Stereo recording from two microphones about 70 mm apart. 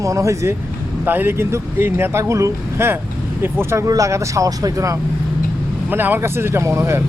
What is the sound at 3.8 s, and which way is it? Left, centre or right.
Speech, right.